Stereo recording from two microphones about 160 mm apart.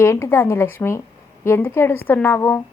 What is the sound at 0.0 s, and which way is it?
A woman's voice, 15° left (ahead or behind).